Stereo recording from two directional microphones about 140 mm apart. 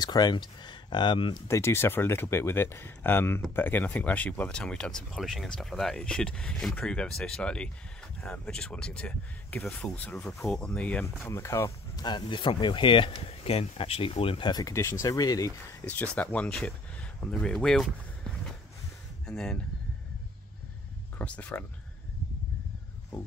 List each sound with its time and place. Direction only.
0.0 s speech: 30° left (ahead or behind)
1.5 s speech: 20° left (ahead or behind)
12.0 s speech: 30° left (ahead or behind)
15.8 s speech: 10° left (ahead or behind)
19.2 s speech: 5° left (ahead or behind)
21.2 s speech: 10° left (ahead or behind)